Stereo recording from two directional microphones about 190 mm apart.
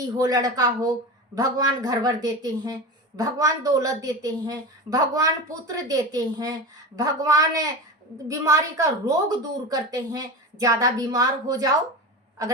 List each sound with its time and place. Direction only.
0.2 s a woman's voice: 20° right (ahead or behind)